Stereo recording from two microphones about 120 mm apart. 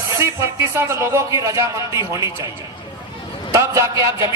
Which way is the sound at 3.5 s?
25° right (ahead or behind).